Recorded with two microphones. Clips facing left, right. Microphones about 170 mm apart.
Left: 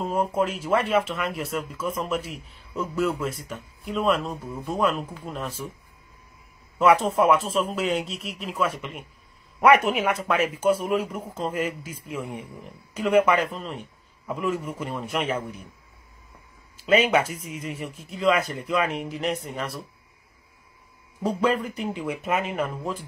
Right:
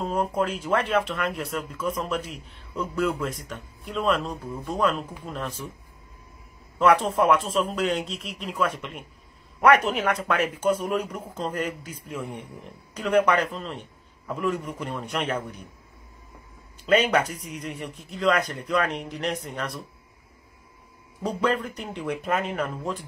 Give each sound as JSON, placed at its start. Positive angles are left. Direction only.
{"t": 0.0, "sound": "speech", "side_deg": 5}
{"t": 6.8, "sound": "speech", "side_deg": 5}
{"t": 16.7, "sound": "speech", "side_deg": 5}
{"t": 21.2, "sound": "speech", "side_deg": 5}